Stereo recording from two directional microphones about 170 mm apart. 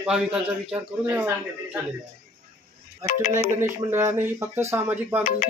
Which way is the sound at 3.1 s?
50° left (ahead or behind).